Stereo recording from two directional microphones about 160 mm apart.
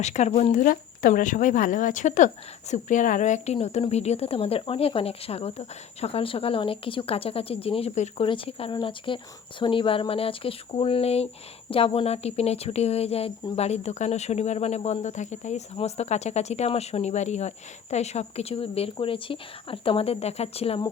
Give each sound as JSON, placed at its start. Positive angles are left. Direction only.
{"t": 0.0, "sound": "speech", "side_deg": 45}